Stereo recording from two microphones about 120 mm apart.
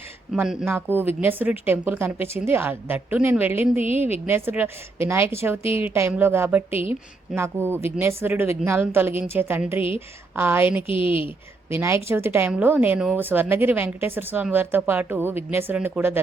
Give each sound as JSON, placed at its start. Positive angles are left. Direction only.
{"t": 0.4, "sound": "speech", "side_deg": -5}
{"t": 0.7, "sound": "speech", "side_deg": -15}
{"t": 3.8, "sound": "speech", "side_deg": 55}
{"t": 4.0, "sound": "a woman's voice", "side_deg": -20}
{"t": 10.8, "sound": "a woman's voice", "side_deg": 50}
{"t": 11.7, "sound": "a woman's voice", "side_deg": -20}